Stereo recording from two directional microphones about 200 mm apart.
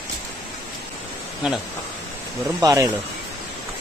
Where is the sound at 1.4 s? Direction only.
5° right (ahead or behind).